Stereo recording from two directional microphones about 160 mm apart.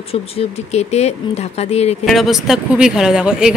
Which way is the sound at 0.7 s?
40° left (ahead or behind).